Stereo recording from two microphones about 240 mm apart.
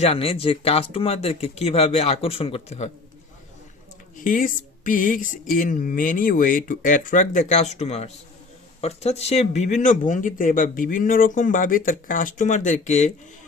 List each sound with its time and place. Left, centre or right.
0.0 s speech: left
4.2 s speech: left